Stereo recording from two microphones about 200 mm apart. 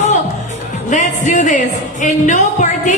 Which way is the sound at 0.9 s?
40° left (ahead or behind).